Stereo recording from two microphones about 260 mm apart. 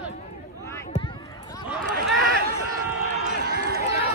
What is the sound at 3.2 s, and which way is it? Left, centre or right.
Run, right.